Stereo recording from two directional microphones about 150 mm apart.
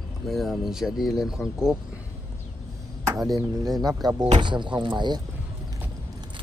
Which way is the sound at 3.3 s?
25° right (ahead or behind).